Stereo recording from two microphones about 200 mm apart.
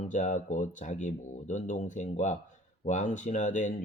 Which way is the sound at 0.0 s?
35° left (ahead or behind).